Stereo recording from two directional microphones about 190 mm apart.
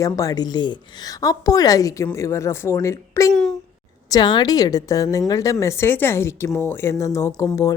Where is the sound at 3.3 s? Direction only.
5° left (ahead or behind).